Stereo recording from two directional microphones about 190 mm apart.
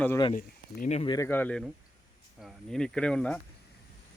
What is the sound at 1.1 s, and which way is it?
Speech, 15° left (ahead or behind).